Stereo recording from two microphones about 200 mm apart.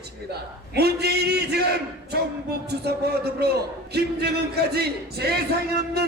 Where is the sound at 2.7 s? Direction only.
55° right (ahead or behind).